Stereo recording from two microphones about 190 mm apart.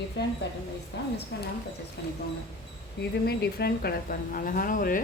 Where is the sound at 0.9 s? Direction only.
60° left (ahead or behind).